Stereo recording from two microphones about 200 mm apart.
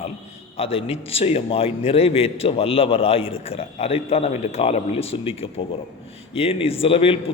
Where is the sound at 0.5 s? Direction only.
30° left (ahead or behind).